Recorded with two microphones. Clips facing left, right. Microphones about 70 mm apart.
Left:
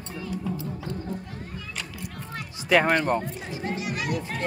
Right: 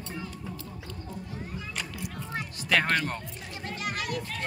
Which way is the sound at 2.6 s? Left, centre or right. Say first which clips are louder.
Left 6 dB; centre.